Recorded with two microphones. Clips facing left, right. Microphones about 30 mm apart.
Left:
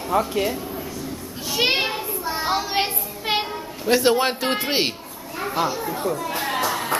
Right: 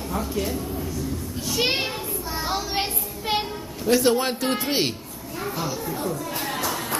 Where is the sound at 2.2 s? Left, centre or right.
Left.